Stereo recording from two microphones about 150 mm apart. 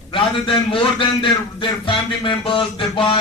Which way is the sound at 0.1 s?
35° left (ahead or behind).